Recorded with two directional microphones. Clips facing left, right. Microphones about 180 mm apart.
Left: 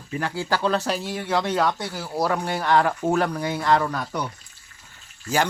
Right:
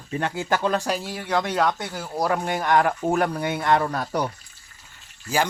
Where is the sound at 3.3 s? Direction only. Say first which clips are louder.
Even; 25° right (ahead or behind).